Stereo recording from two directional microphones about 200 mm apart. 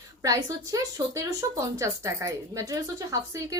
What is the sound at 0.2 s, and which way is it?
Speech, 20° right (ahead or behind).